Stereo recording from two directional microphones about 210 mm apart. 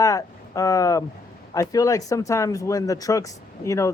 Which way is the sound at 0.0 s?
15° left (ahead or behind).